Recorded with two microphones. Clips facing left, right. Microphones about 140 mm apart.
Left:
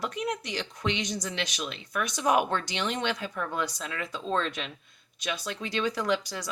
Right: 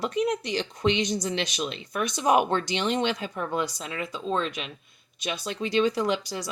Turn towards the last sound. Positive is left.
turn(degrees=-20)  # may be behind; listen again after turning